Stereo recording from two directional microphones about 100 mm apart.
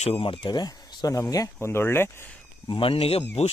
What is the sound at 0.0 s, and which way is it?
Speech, 70° left (ahead or behind).